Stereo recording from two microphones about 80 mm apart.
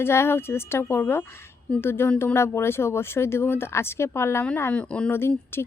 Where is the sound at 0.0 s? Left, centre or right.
Left.